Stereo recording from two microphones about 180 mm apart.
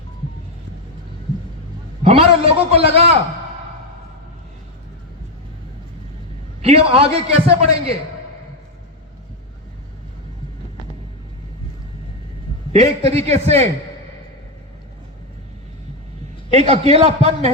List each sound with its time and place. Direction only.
2.0 s a man's voice: 35° right (ahead or behind)
6.6 s a man's voice: 35° right (ahead or behind)
12.8 s a man's voice: 35° right (ahead or behind)
16.5 s a man's voice: 35° right (ahead or behind)